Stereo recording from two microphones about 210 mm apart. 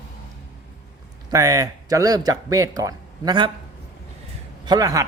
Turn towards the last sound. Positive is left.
turn(degrees=-15)  # may be behind; listen again after turning